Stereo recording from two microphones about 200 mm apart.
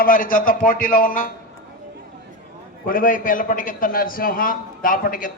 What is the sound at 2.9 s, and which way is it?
A man's voice, 45° left (ahead or behind).